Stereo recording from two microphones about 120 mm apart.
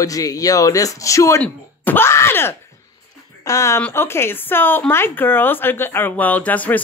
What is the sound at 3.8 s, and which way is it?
Speech, 15° left (ahead or behind).